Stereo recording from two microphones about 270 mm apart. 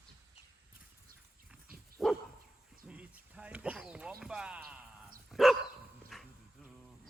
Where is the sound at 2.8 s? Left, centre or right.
Centre.